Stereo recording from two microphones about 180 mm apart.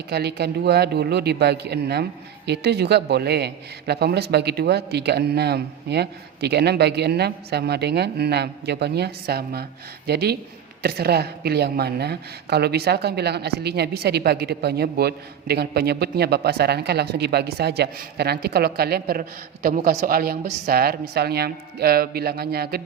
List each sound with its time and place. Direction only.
0.1 s a woman's voice: 60° right (ahead or behind)